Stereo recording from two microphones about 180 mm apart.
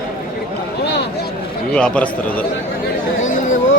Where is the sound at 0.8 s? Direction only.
70° left (ahead or behind).